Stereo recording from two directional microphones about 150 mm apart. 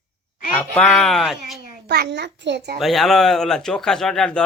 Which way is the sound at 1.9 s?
90° right.